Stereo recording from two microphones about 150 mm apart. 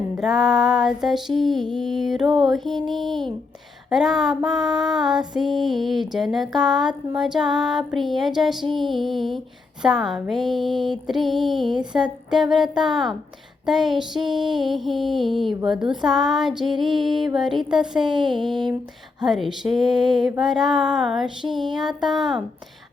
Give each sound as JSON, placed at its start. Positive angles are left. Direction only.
{"t": 0.2, "sound": "music", "side_deg": 0}